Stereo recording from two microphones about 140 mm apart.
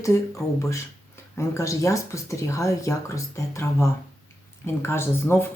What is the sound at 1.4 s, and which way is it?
Speech, 20° left (ahead or behind).